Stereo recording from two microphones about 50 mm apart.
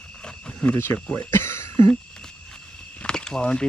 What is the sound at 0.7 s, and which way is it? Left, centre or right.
Speech, left.